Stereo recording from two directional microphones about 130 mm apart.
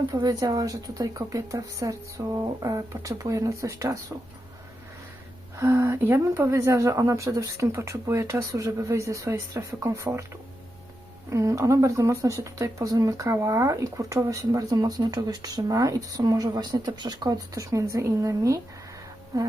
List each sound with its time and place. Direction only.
0.1 s speech: 25° right (ahead or behind)
5.5 s speech: 20° right (ahead or behind)
11.3 s speech: 25° right (ahead or behind)